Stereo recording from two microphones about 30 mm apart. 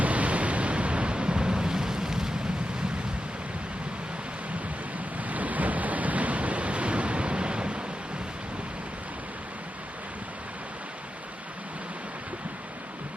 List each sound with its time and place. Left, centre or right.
0.0 s waves: right; by 2.3 s centre
5.2 s waves: right